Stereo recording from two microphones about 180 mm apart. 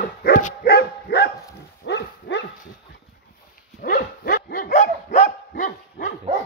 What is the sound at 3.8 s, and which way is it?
Dog, 55° left (ahead or behind).